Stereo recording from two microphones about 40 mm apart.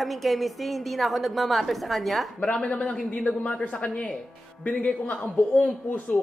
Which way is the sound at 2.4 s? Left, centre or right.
Left.